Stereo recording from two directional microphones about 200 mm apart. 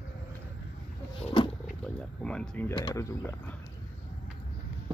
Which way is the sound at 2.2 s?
5° left (ahead or behind).